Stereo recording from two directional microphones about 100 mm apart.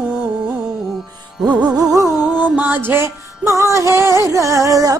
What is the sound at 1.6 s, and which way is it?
Music, 40° right (ahead or behind).